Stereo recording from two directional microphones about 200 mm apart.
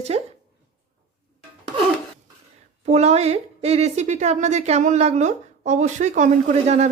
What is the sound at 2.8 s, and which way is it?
A woman's voice, 35° right (ahead or behind).